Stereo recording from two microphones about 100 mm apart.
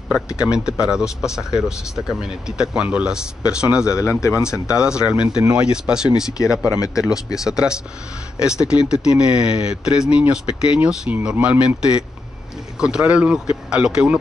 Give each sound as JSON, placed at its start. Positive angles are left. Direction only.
{"t": 0.1, "sound": "speech", "side_deg": -10}
{"t": 3.9, "sound": "speech", "side_deg": 25}
{"t": 4.6, "sound": "speech", "side_deg": -10}